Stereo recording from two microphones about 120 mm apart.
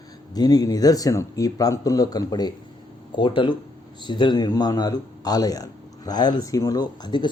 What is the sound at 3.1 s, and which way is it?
A man's voice, 45° left (ahead or behind).